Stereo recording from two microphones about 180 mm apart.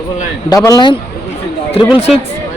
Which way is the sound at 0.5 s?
20° left (ahead or behind).